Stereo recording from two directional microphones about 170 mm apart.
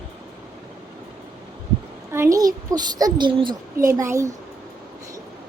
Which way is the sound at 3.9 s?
15° right (ahead or behind).